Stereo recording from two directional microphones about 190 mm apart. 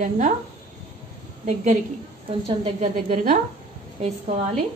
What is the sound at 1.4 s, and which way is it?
A woman's voice, 40° right (ahead or behind).